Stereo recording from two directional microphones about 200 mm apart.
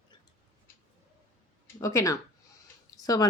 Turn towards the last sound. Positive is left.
turn(degrees=20)  # may be behind; listen again after turning